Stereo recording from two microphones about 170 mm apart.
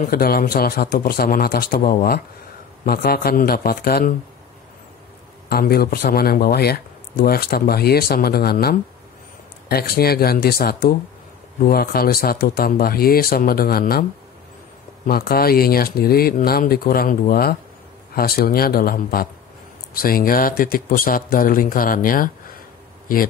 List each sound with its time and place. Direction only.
0.0 s speech: 60° left (ahead or behind)
5.5 s speech: 65° left (ahead or behind)
15.0 s speech: 60° left (ahead or behind)